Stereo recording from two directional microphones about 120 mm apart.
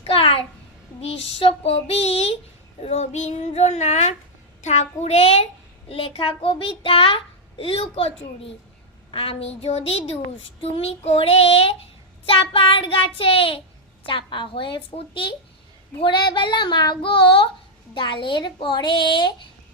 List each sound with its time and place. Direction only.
0.0 s a child's voice: 50° left (ahead or behind)
1.6 s child singing: 60° left (ahead or behind)
16.0 s a child's voice: 40° left (ahead or behind)